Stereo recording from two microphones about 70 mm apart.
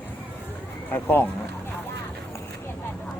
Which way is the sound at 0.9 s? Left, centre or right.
Left.